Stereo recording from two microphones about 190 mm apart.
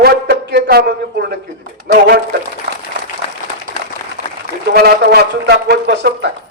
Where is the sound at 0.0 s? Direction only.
60° right (ahead or behind).